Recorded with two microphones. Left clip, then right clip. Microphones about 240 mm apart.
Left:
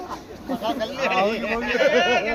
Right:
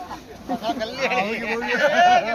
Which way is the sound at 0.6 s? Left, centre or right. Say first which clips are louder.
Left 1 dB; right.